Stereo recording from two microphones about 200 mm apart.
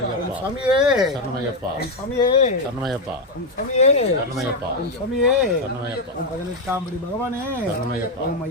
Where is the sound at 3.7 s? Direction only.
35° left (ahead or behind).